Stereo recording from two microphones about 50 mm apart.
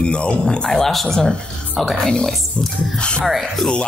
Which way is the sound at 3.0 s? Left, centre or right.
Centre.